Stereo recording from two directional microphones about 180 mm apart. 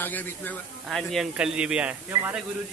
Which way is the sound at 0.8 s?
Centre (ahead or behind).